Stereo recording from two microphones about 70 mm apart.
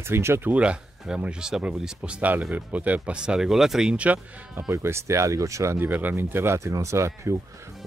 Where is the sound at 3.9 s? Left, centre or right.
Right.